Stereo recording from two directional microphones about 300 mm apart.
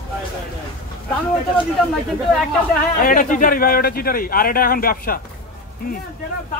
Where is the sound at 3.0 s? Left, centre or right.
Left.